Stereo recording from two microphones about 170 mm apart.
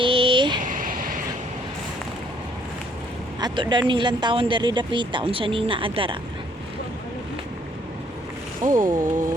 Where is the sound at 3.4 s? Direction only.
30° right (ahead or behind).